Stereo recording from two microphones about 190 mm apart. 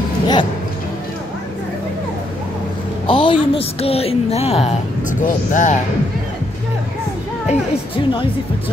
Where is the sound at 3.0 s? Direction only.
25° left (ahead or behind).